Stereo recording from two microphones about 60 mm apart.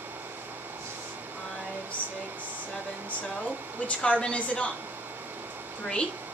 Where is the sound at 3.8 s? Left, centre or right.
Left.